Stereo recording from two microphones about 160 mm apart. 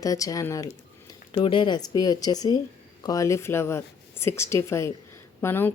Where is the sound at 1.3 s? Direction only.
30° left (ahead or behind).